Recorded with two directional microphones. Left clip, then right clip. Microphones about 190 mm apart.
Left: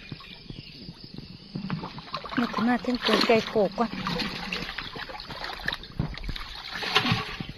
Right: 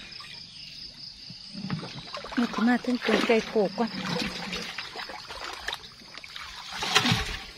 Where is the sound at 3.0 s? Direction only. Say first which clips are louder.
Left 5 dB; 40° left (ahead or behind).